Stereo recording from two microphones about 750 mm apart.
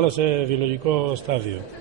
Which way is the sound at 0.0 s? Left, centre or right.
Right.